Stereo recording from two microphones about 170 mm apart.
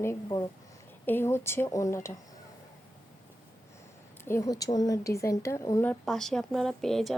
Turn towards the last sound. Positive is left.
turn(degrees=0)  # may be behind; listen again after turning